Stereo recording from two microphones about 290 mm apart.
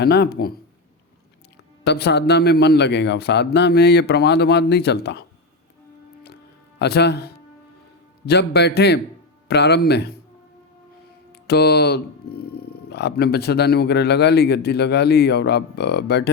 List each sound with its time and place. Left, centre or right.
0.0 s speech: left
1.8 s speech: left
6.7 s speech: left
11.3 s speech: left